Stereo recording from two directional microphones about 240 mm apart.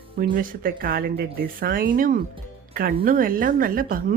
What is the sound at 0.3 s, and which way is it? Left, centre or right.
A woman's voice, right.